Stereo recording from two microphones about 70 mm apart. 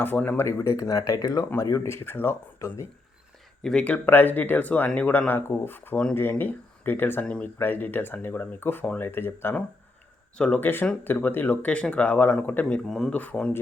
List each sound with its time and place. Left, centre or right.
0.0 s speech: left
0.6 s speech: left
3.6 s speech: centre
3.8 s speech: left
10.3 s speech: centre
10.6 s speech: left